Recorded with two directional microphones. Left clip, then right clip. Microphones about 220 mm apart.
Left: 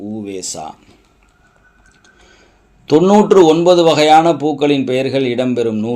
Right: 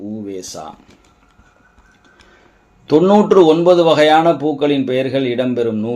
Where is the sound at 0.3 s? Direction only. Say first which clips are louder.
Left 3 dB; 25° left (ahead or behind).